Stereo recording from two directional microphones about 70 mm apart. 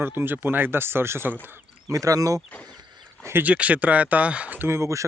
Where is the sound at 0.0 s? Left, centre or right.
Right.